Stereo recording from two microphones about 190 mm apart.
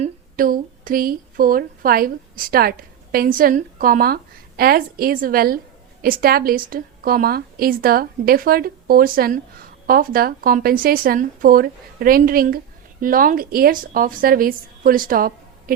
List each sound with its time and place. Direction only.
0.0 s a woman's voice: 45° right (ahead or behind)